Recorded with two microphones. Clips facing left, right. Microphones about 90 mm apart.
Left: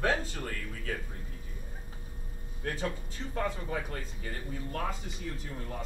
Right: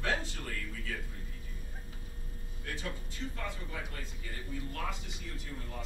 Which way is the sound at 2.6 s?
40° left (ahead or behind).